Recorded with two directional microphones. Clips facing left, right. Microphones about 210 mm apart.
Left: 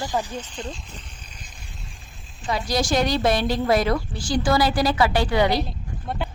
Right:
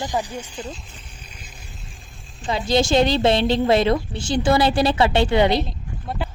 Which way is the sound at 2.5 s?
25° right (ahead or behind).